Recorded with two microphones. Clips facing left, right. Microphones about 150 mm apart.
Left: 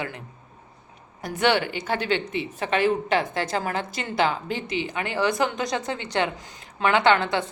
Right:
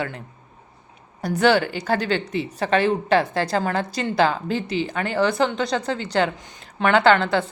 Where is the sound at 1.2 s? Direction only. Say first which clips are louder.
Right 4 dB; 35° right (ahead or behind).